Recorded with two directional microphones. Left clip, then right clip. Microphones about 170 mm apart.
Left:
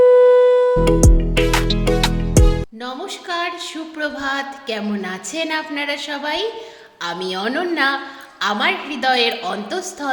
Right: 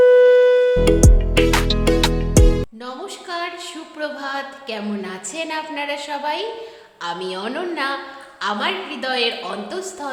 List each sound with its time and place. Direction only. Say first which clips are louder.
0.3 s music: left 1 dB; centre (ahead or behind)
2.8 s music: left 3 dB; 20° left (ahead or behind)
3.9 s a woman's voice: left 3 dB; 20° left (ahead or behind)